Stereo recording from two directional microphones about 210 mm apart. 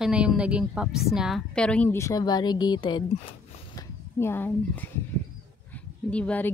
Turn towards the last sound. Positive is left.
turn(degrees=5)  # may be behind; listen again after turning